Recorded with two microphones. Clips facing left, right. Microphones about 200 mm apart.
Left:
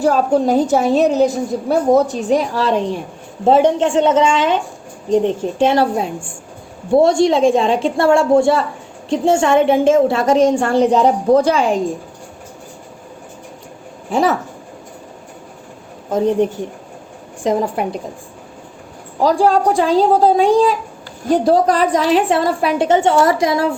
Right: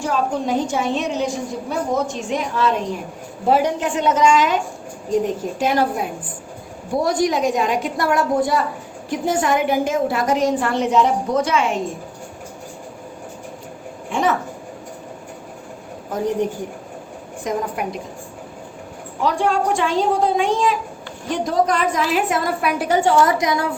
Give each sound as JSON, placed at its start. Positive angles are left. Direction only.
{"t": 0.0, "sound": "a woman's voice", "side_deg": 40}
{"t": 14.1, "sound": "a woman's voice", "side_deg": 35}
{"t": 16.1, "sound": "a woman's voice", "side_deg": 25}
{"t": 19.2, "sound": "a woman's voice", "side_deg": 35}